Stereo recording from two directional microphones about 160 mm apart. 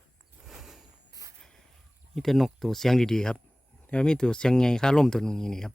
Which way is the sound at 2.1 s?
Centre (ahead or behind).